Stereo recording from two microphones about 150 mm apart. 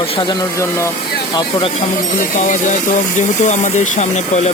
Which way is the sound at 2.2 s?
60° left (ahead or behind).